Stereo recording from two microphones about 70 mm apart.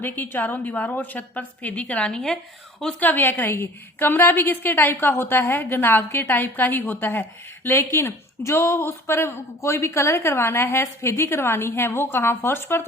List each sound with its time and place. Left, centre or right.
0.0 s a woman's voice: left; by 2.4 s centre
3.0 s a woman's voice: left